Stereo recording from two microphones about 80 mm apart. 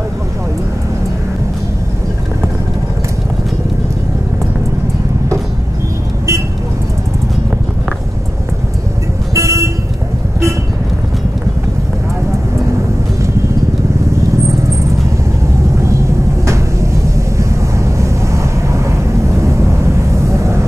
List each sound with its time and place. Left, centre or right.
9.3 s vehicle: right
17.4 s vehicle: right
20.2 s a sound: right